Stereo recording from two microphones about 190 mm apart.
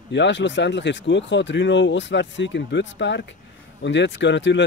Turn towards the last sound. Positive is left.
turn(degrees=70)  # may be behind; listen again after turning